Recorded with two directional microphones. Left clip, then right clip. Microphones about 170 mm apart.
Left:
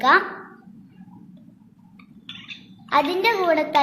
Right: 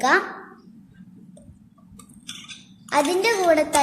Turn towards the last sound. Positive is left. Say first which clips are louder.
# right 1 dB
turn(degrees=-40)  # may be behind; listen again after turning